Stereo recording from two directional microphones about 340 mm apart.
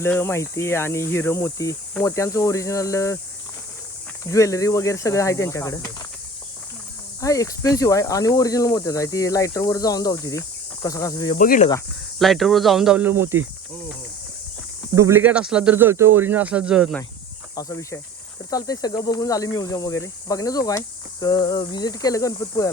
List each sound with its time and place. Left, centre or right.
0.0 s speech: centre
4.3 s speech: centre
7.2 s speech: centre
11.3 s speech: left
12.2 s speech: centre
14.9 s speech: centre
17.5 s speech: centre